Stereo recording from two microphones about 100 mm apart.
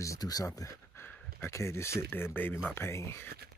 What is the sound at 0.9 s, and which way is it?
Speech, 20° left (ahead or behind).